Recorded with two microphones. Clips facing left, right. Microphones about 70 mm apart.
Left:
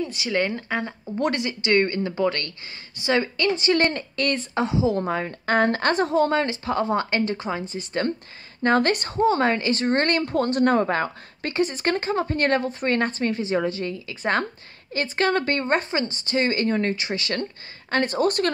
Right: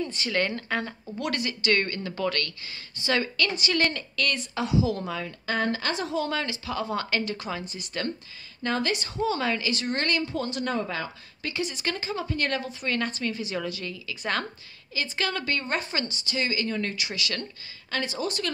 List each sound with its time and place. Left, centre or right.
0.0 s a woman's voice: centre; by 8.1 s left
8.6 s a woman's voice: left
15.0 s a woman's voice: left
17.9 s speech: left